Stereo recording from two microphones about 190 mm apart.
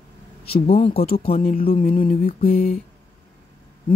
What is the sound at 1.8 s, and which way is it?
Speech, 45° left (ahead or behind).